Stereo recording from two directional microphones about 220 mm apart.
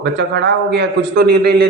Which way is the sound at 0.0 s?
50° right (ahead or behind).